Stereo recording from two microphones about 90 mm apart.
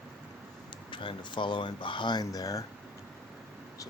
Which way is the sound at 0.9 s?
65° left (ahead or behind).